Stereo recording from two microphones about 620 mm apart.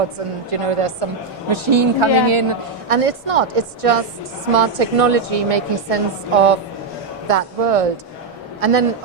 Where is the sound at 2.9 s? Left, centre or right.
Right.